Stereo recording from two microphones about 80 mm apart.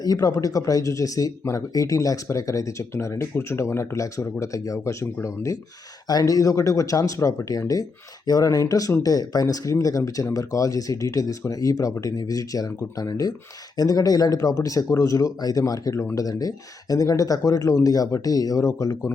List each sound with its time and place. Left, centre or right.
0.0 s speech: left
6.1 s speech: left